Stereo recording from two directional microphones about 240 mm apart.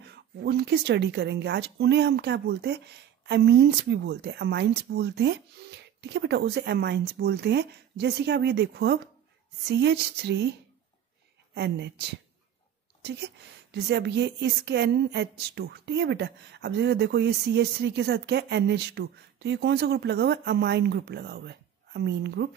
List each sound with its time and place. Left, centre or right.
0.0 s a woman's voice: right
11.5 s a woman's voice: right
13.0 s a woman's voice: right